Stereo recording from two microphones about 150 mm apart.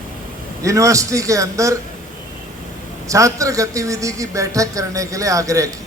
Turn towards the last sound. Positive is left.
turn(degrees=-20)  # may be behind; listen again after turning